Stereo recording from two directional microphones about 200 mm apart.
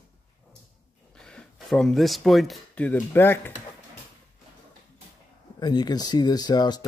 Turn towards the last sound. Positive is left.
turn(degrees=20)  # may be behind; listen again after turning